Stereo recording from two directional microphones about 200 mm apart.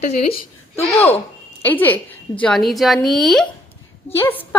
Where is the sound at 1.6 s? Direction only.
10° left (ahead or behind).